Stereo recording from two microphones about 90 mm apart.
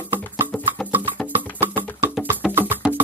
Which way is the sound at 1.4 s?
20° right (ahead or behind).